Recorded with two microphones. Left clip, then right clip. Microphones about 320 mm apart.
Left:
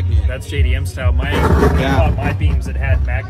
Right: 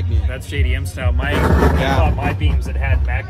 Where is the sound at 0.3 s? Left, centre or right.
Centre.